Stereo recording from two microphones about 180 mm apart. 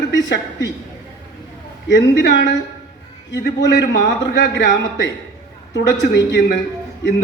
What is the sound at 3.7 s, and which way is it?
A man's voice, 70° left (ahead or behind).